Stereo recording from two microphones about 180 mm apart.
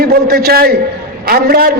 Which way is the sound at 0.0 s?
55° right (ahead or behind).